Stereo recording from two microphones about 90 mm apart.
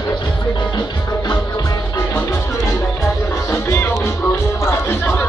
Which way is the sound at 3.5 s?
30° left (ahead or behind).